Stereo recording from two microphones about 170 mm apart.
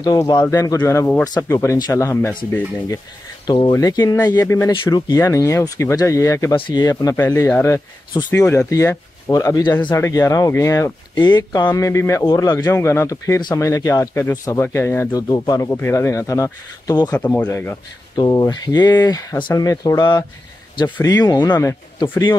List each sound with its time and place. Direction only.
0.0 s speech: 25° left (ahead or behind)
3.4 s speech: 30° left (ahead or behind)
17.2 s speech: 10° left (ahead or behind)